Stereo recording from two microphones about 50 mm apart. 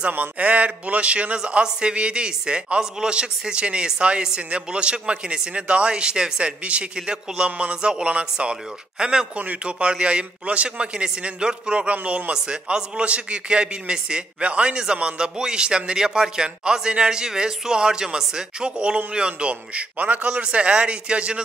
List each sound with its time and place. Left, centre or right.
0.1 s a man's voice: right; by 9.3 s centre
9.4 s a man's voice: right